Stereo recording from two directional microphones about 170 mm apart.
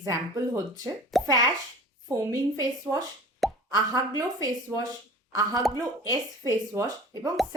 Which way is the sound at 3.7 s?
25° right (ahead or behind).